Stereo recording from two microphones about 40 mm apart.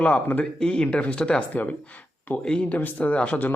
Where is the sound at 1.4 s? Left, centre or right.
Left.